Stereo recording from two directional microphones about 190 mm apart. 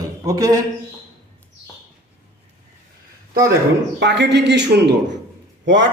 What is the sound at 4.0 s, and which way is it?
Speech, 65° right (ahead or behind).